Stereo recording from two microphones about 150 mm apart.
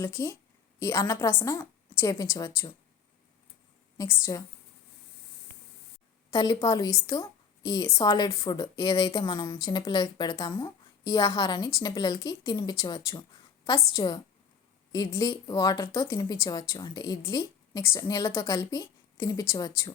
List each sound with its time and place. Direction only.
0.0 s a woman's voice: 20° left (ahead or behind)
3.9 s a woman's voice: 20° left (ahead or behind)
6.3 s a woman's voice: 25° left (ahead or behind)